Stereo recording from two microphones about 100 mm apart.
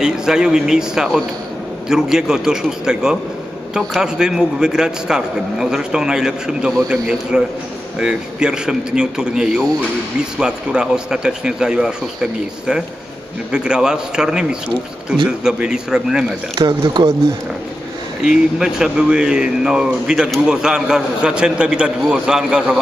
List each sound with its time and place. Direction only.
0.0 s a man's voice: 5° right (ahead or behind)
16.5 s speech: 45° right (ahead or behind)
18.2 s speech: 5° right (ahead or behind)